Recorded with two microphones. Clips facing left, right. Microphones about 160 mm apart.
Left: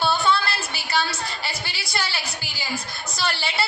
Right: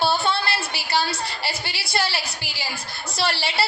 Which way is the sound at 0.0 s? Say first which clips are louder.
Even; 30° right (ahead or behind).